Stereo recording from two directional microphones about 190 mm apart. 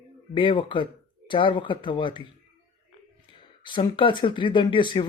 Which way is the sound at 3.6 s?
25° left (ahead or behind).